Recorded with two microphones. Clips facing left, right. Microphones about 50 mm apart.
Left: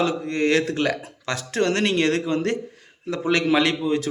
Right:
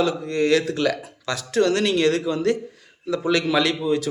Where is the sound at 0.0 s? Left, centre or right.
Left.